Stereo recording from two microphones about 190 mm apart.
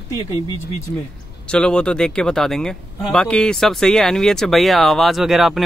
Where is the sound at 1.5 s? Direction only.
5° left (ahead or behind).